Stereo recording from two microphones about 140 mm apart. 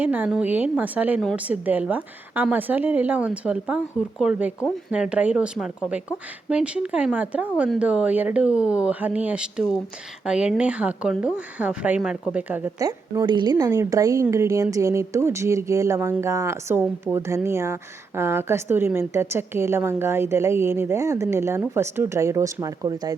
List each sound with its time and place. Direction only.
0.0 s a woman's voice: 10° right (ahead or behind)
12.8 s a woman's voice: 30° right (ahead or behind)